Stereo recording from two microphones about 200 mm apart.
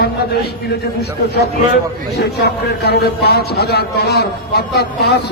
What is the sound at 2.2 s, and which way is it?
Speech, 55° left (ahead or behind).